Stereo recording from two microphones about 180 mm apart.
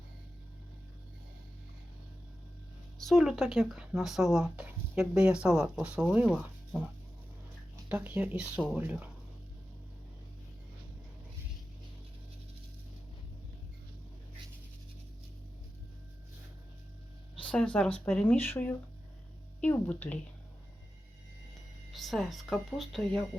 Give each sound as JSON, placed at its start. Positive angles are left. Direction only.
{"t": 3.0, "sound": "speech", "side_deg": 0}
{"t": 6.3, "sound": "music", "side_deg": -5}
{"t": 7.9, "sound": "speech", "side_deg": -10}
{"t": 17.5, "sound": "speech", "side_deg": 5}
{"t": 21.9, "sound": "speech", "side_deg": 0}